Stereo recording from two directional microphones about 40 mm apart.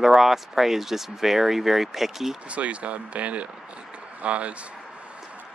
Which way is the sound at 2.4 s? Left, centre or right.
Right.